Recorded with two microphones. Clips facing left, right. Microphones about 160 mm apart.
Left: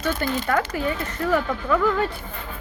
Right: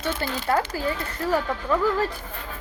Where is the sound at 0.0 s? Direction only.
30° right (ahead or behind).